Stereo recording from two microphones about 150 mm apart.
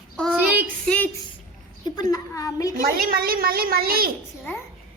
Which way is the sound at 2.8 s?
80° right.